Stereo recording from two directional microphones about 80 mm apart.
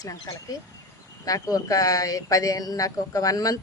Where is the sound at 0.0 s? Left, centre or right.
Left.